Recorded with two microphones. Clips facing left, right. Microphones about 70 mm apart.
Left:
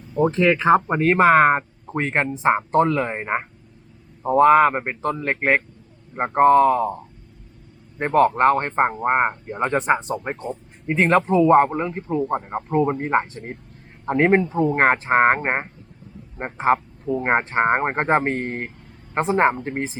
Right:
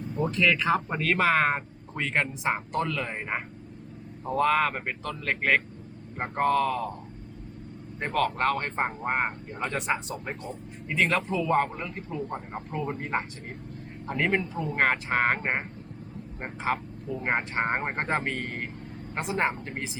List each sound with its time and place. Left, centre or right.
0.3 s speech: left